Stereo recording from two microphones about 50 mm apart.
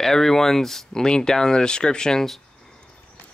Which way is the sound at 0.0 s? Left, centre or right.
Centre.